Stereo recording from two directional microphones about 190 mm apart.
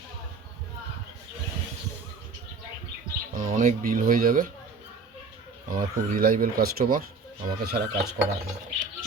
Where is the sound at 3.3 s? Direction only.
45° right (ahead or behind).